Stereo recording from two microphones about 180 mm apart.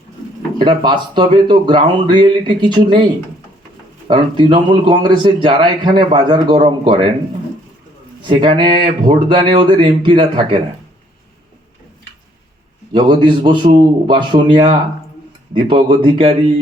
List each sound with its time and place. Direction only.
0.6 s a man's voice: 25° right (ahead or behind)
4.1 s a man's voice: 25° right (ahead or behind)
8.3 s a man's voice: 25° right (ahead or behind)
12.9 s a man's voice: 25° right (ahead or behind)